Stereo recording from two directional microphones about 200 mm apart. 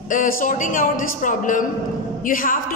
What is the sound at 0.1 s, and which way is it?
A woman's voice, 40° left (ahead or behind).